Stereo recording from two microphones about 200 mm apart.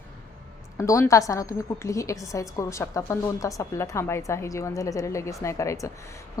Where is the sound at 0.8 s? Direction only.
15° left (ahead or behind).